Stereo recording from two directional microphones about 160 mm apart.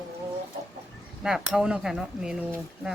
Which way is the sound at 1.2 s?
5° right (ahead or behind).